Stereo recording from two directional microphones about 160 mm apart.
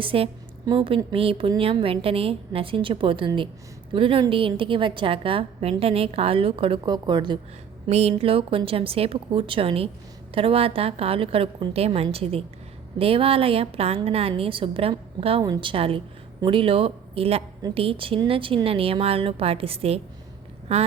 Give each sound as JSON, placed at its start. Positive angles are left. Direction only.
{"t": 0.0, "sound": "speech", "side_deg": -35}
{"t": 7.9, "sound": "speech", "side_deg": -40}